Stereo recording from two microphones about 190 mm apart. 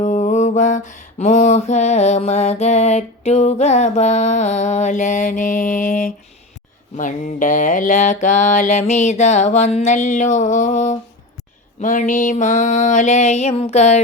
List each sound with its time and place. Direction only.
0.0 s mantra: 40° left (ahead or behind)